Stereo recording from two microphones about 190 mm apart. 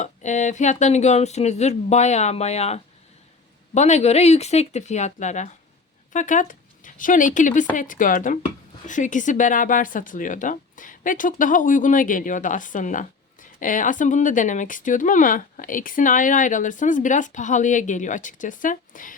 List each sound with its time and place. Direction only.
0.0 s speech: 40° left (ahead or behind)